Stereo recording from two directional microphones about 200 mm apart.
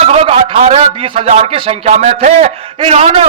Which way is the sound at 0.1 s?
30° right (ahead or behind).